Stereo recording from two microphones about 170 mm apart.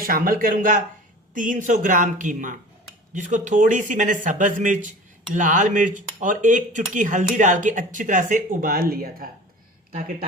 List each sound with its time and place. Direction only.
0.0 s speech: 55° right (ahead or behind)